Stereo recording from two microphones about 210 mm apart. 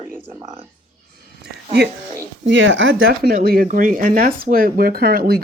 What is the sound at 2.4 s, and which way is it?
Speech, 60° right (ahead or behind).